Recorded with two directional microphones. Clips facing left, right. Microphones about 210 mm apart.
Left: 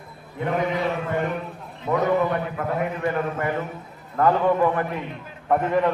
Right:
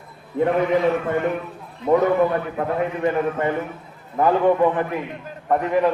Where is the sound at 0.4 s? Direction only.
35° right (ahead or behind).